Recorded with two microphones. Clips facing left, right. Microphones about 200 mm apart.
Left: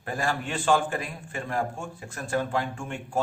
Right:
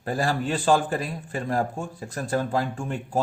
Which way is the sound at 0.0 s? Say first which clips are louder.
Right 4 dB; 35° right (ahead or behind).